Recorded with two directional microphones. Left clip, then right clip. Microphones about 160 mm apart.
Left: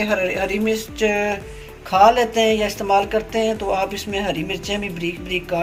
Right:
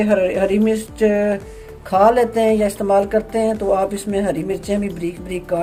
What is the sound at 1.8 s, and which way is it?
A woman's voice, 60° right (ahead or behind).